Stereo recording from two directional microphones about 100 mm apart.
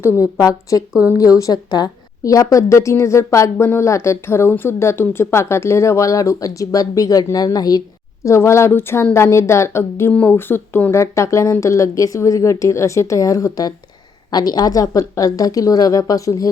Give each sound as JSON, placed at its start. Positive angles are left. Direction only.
{"t": 0.0, "sound": "a woman's voice", "side_deg": 30}
{"t": 8.2, "sound": "a woman's voice", "side_deg": 30}
{"t": 10.9, "sound": "a woman's voice", "side_deg": 30}